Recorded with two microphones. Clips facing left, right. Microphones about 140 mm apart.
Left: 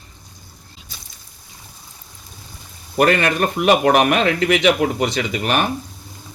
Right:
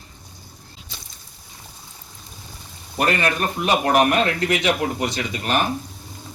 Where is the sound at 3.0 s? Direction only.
75° left (ahead or behind).